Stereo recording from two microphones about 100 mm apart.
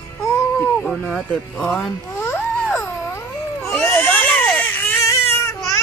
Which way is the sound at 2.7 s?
25° left (ahead or behind).